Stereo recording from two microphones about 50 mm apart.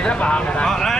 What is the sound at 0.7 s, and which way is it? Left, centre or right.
Speech, centre.